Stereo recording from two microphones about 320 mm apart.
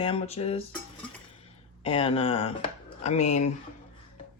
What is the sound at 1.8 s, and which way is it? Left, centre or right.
Speech, centre.